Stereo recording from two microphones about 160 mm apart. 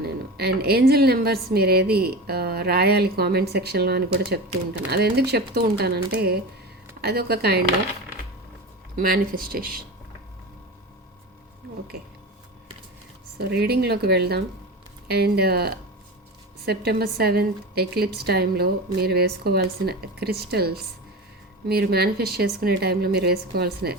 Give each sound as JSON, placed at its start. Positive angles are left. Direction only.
{"t": 0.3, "sound": "a woman's voice", "side_deg": -85}
{"t": 9.0, "sound": "speech", "side_deg": -65}
{"t": 13.5, "sound": "a woman's voice", "side_deg": -80}